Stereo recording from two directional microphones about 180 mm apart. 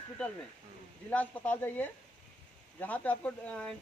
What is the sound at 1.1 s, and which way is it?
Speech, 10° left (ahead or behind).